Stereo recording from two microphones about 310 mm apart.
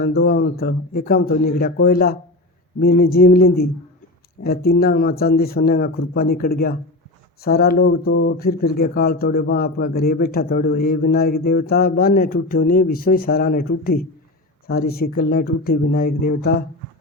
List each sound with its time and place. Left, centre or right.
0.0 s speech: left